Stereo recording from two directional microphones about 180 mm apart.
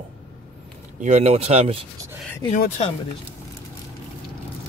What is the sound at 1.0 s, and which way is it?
Speech, 35° right (ahead or behind).